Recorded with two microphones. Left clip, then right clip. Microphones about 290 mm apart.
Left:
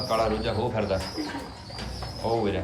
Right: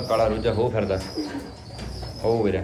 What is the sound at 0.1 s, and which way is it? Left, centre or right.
Speech, centre.